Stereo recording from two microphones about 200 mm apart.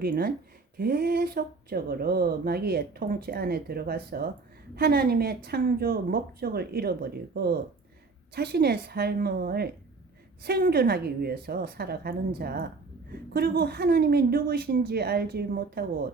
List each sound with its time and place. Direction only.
0.0 s speech: 45° right (ahead or behind)